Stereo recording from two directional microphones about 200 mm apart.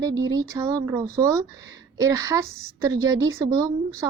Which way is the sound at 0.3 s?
15° right (ahead or behind).